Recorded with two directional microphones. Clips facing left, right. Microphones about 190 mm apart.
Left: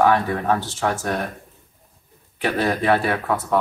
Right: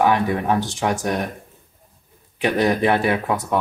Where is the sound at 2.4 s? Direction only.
15° right (ahead or behind).